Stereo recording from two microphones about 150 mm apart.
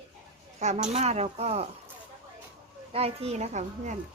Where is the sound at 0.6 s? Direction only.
50° right (ahead or behind).